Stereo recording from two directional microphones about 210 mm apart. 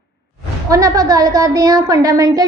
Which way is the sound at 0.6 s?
15° right (ahead or behind).